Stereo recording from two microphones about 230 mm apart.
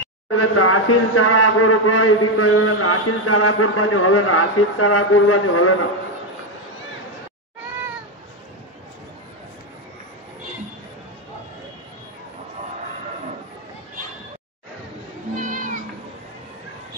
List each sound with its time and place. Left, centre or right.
0.4 s a man's voice: left
15.3 s music: right